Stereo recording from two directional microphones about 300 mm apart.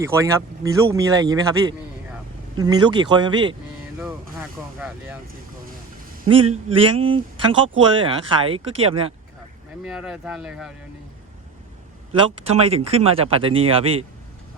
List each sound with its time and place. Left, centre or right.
0.0 s speech: centre
2.6 s speech: centre
3.9 s speech: centre
6.2 s speech: centre
9.8 s speech: centre
12.5 s speech: centre